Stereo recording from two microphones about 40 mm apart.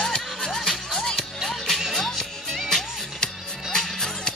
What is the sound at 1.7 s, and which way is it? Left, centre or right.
Music, centre.